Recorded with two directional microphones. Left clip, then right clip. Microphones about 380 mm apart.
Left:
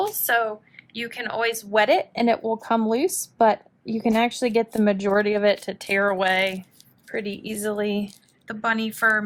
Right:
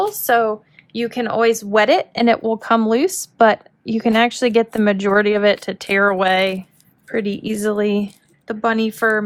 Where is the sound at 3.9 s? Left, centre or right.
Left.